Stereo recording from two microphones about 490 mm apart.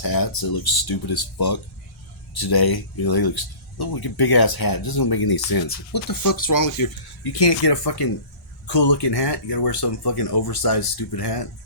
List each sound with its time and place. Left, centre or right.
0.0 s speech: left